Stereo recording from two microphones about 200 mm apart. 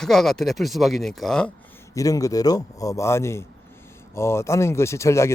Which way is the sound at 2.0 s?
15° left (ahead or behind).